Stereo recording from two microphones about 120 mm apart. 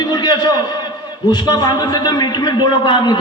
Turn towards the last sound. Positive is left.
turn(degrees=40)  # may be behind; listen again after turning